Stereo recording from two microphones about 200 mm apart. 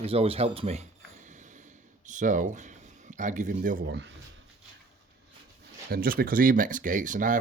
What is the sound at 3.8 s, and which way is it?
Cutlery, 60° right (ahead or behind).